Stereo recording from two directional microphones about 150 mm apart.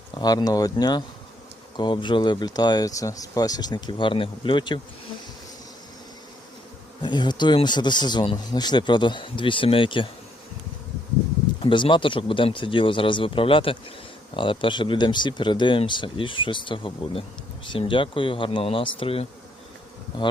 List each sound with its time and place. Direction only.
0.1 s speech: 30° left (ahead or behind)
7.0 s speech: 30° left (ahead or behind)
11.6 s speech: 35° left (ahead or behind)